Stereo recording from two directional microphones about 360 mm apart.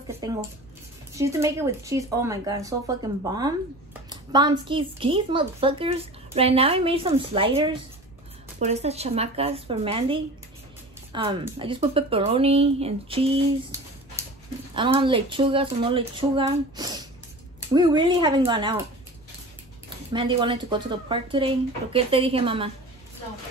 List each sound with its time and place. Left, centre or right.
0.2 s speech: centre
13.7 s a sound: centre
14.2 s dog: centre
14.8 s speech: centre
20.1 s speech: centre